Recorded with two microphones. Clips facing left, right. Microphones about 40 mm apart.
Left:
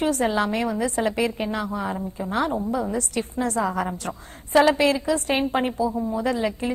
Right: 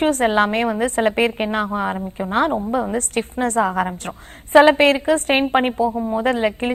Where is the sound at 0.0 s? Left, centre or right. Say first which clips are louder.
Right 5 dB; right.